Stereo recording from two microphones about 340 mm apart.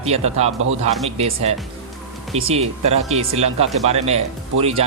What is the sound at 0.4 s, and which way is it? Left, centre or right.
Speech, centre.